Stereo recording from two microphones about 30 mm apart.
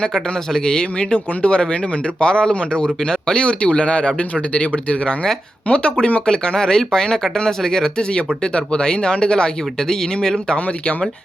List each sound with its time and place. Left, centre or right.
0.6 s speech: left
5.6 s speech: left; by 7.9 s centre
8.5 s speech: left